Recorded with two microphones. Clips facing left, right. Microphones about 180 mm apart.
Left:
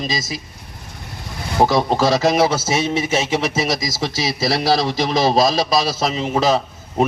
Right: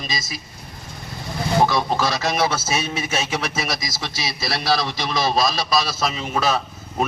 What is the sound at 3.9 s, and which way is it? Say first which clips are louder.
A man's voice: left 7 dB; 40° left (ahead or behind).